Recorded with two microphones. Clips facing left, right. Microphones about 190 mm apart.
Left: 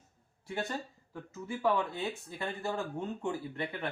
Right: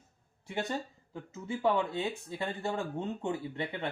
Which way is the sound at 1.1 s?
20° right (ahead or behind).